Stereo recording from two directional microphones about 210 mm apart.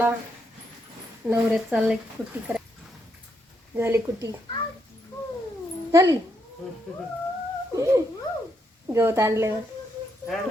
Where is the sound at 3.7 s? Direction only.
10° right (ahead or behind).